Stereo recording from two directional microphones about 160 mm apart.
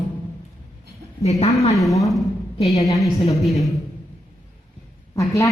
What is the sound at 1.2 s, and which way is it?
Speech, 40° left (ahead or behind).